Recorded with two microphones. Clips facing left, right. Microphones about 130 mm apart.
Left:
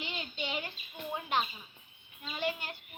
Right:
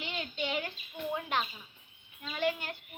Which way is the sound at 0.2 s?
5° left (ahead or behind).